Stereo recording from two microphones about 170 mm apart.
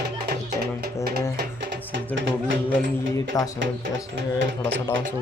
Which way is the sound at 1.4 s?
80° right.